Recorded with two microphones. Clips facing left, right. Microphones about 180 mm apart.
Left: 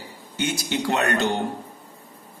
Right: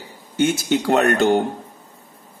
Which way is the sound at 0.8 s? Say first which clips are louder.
Right 6 dB; 50° right (ahead or behind).